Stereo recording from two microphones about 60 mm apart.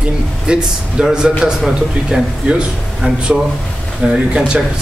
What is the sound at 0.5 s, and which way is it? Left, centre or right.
Speech, centre.